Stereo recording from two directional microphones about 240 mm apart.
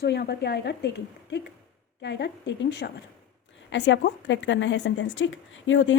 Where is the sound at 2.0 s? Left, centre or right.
Left.